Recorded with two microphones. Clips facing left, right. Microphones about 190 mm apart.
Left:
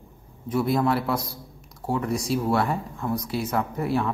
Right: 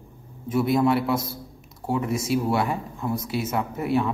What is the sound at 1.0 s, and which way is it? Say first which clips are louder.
Speech: right 2 dB; centre (ahead or behind).